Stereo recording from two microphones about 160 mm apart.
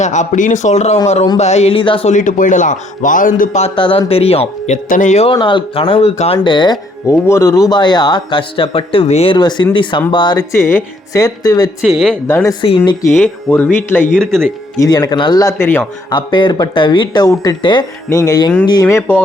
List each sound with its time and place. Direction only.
0.0 s a man's voice: 50° left (ahead or behind); by 2.0 s 30° left (ahead or behind)
2.0 s a man's voice: 50° left (ahead or behind)
3.8 s speech: 35° left (ahead or behind)
5.3 s a man's voice: 30° left (ahead or behind)
7.1 s a man's voice: 15° left (ahead or behind)
11.8 s speech: centre (ahead or behind)
12.6 s a man's voice: 30° left (ahead or behind)
13.2 s speech: 10° left (ahead or behind)
14.8 s a man's voice: 25° left (ahead or behind)
16.0 s a man's voice: 30° left (ahead or behind)